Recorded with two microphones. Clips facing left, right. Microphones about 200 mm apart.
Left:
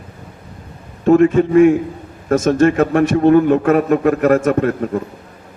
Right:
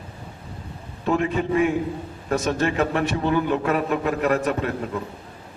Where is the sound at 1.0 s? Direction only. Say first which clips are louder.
Left 12 dB; 45° left (ahead or behind).